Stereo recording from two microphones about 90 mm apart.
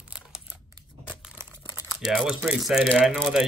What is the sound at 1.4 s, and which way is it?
Crumpling, 30° right (ahead or behind).